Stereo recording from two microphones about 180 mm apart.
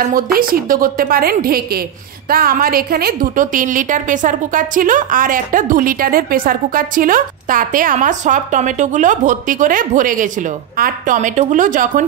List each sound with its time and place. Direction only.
0.1 s a woman's voice: 50° right (ahead or behind)